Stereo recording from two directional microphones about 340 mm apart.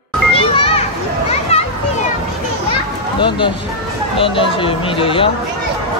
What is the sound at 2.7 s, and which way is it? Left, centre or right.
Children playing, centre.